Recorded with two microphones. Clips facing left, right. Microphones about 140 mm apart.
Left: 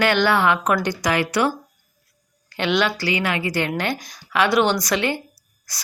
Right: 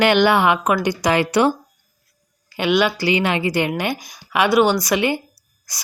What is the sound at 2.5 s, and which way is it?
Speech, 10° right (ahead or behind).